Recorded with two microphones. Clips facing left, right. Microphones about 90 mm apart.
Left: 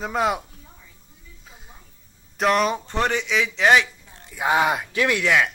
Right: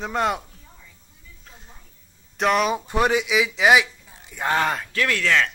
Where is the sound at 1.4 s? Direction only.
5° left (ahead or behind).